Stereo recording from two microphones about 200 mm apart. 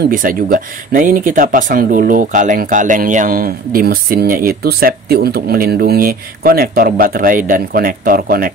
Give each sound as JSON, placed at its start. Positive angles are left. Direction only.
{"t": 0.1, "sound": "speech", "side_deg": -45}